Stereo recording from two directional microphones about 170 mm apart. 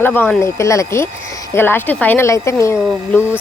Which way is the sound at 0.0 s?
10° left (ahead or behind).